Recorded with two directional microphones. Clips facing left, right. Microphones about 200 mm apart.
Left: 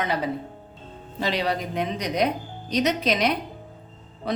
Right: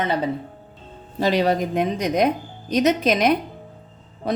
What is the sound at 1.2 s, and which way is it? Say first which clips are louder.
A woman's voice: right 6 dB; 45° right (ahead or behind).